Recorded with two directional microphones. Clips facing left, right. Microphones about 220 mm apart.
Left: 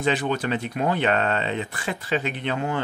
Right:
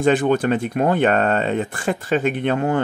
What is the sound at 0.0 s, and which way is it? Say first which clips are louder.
Speech: right 7 dB; 50° right (ahead or behind).